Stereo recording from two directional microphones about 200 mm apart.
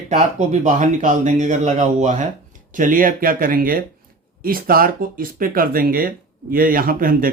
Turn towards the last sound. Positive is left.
turn(degrees=-45)  # may be behind; listen again after turning